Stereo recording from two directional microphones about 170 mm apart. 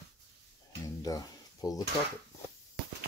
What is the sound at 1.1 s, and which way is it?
Speech, 20° left (ahead or behind).